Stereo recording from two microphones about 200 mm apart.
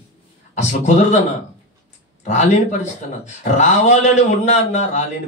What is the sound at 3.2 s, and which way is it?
A man's voice, 35° left (ahead or behind).